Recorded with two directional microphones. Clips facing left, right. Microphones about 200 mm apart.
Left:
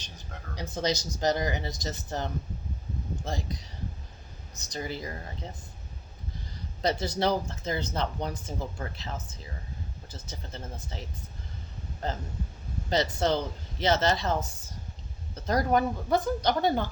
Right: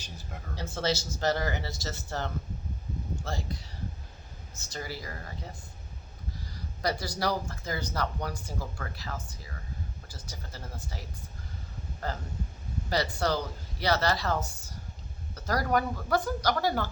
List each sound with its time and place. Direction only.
0.5 s speech: 15° left (ahead or behind)
6.8 s speech: 25° left (ahead or behind)
12.0 s speech: 20° left (ahead or behind)